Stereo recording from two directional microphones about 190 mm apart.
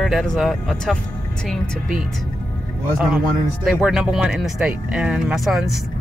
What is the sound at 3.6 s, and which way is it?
Speech, 5° right (ahead or behind).